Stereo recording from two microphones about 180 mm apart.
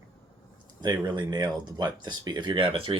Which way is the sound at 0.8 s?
20° right (ahead or behind).